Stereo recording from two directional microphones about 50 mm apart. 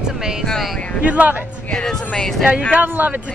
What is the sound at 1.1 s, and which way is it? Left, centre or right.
Speech, right.